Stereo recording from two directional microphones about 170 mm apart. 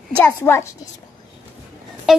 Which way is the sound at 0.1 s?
15° left (ahead or behind).